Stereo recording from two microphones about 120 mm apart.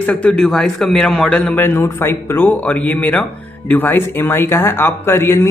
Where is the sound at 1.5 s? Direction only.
15° left (ahead or behind).